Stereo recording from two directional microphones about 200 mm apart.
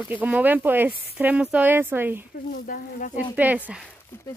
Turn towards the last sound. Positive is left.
turn(degrees=15)  # may be behind; listen again after turning